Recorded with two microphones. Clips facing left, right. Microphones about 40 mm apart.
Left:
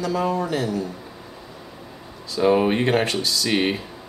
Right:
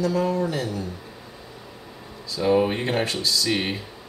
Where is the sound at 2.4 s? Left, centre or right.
Left.